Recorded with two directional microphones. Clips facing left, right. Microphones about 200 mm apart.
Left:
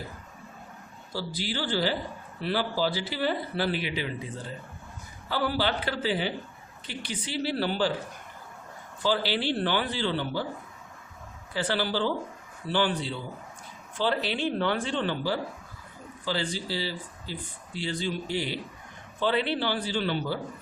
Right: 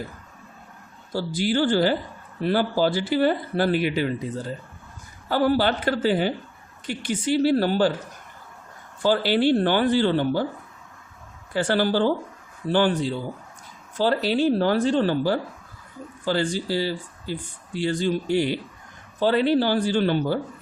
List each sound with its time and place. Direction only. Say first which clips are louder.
1.1 s speech: right 9 dB; 50° right (ahead or behind)
9.0 s speech: right 7 dB; 50° right (ahead or behind)
11.5 s speech: right 7 dB; 50° right (ahead or behind)